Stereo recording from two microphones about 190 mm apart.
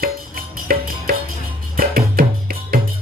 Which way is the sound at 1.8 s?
50° right (ahead or behind).